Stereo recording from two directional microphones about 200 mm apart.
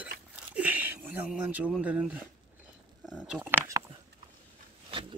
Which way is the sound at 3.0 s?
5° right (ahead or behind).